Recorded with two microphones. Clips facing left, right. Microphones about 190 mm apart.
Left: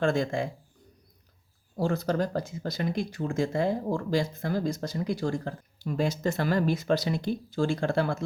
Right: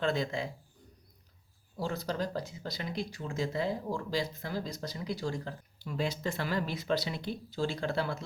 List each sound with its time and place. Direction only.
0.0 s speech: 50° left (ahead or behind)
1.7 s speech: 50° left (ahead or behind)